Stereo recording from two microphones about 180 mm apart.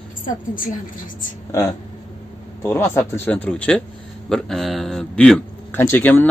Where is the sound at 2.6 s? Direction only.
15° left (ahead or behind).